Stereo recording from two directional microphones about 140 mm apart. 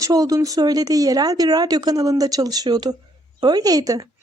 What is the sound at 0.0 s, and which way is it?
Speech, 25° right (ahead or behind).